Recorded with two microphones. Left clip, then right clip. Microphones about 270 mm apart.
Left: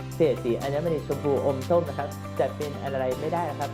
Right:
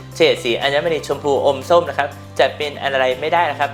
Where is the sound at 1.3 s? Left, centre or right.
Right.